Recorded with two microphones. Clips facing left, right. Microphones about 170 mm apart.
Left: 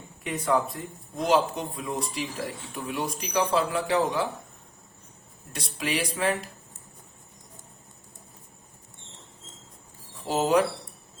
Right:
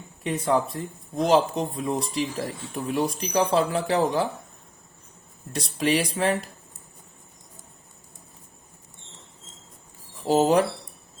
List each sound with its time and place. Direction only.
0.4 s speech: 30° right (ahead or behind)
5.5 s speech: 35° right (ahead or behind)
10.2 s speech: 35° right (ahead or behind)